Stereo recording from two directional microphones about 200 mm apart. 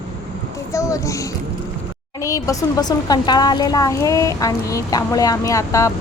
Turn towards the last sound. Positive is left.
turn(degrees=15)  # may be behind; listen again after turning